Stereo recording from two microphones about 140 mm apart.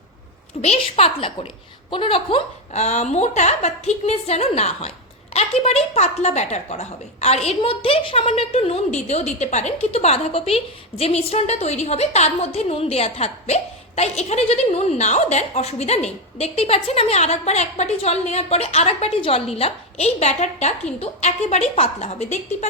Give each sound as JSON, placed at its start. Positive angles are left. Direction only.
{"t": 0.6, "sound": "a woman's voice", "side_deg": 50}